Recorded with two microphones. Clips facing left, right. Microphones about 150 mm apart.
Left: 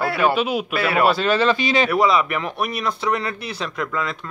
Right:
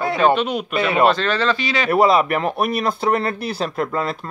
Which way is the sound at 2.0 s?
45° right (ahead or behind).